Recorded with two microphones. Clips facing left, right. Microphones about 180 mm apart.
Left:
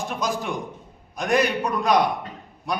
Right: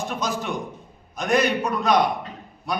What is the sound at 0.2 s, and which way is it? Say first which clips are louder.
A man's voice: even; 15° left (ahead or behind).